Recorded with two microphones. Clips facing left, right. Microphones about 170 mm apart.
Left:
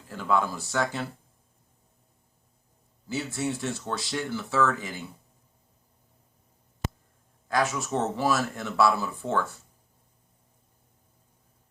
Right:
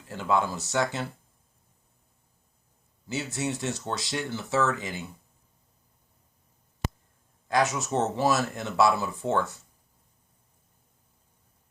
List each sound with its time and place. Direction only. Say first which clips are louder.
0.1 s speech: even; 20° right (ahead or behind)
3.1 s speech: left 1 dB; 20° right (ahead or behind)
7.4 s speech: right 1 dB; 20° right (ahead or behind)